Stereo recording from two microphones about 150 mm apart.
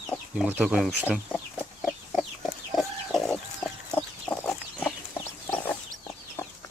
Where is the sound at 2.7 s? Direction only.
Centre (ahead or behind).